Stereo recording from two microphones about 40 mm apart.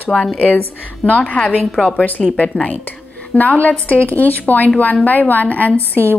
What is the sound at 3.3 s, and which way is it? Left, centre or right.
A woman's voice, left.